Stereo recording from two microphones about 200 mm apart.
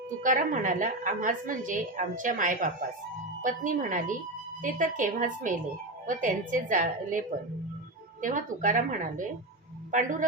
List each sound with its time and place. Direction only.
0.2 s a woman's voice: 40° right (ahead or behind)